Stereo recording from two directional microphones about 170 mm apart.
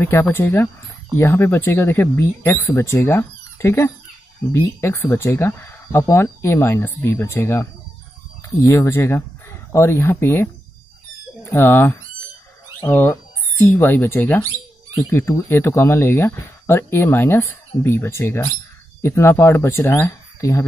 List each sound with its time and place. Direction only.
0.0 s speech: 15° left (ahead or behind)
8.6 s speech: 15° left (ahead or behind)